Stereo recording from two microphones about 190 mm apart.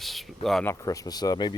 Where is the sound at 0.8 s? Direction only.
20° left (ahead or behind).